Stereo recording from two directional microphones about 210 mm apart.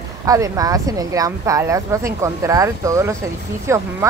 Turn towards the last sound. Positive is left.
turn(degrees=-15)  # may be behind; listen again after turning